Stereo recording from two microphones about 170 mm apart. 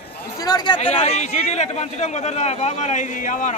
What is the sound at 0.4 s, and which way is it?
Speech, 25° left (ahead or behind).